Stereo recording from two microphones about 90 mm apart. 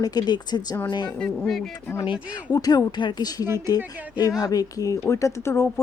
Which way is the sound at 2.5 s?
45° left (ahead or behind).